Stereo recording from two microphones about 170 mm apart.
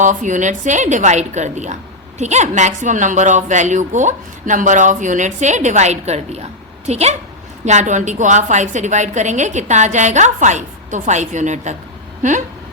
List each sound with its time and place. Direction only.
0.0 s a woman's voice: 50° right (ahead or behind)